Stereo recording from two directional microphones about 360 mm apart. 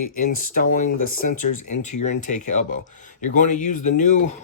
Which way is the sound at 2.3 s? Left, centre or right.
Centre.